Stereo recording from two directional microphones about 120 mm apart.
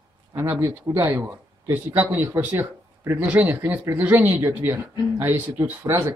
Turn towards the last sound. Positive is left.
turn(degrees=-20)  # may be behind; listen again after turning